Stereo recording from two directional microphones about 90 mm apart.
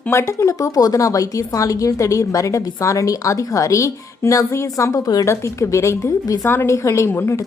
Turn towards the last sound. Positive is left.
turn(degrees=30)  # may be behind; listen again after turning